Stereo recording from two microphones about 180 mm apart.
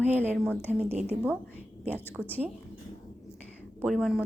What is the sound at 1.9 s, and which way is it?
Speech, 10° left (ahead or behind).